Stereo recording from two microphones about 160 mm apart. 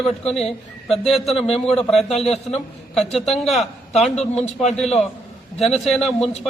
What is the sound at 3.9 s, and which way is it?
Speech, 45° left (ahead or behind).